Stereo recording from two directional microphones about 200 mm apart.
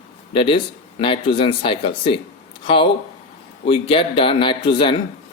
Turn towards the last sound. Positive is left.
turn(degrees=25)  # may be behind; listen again after turning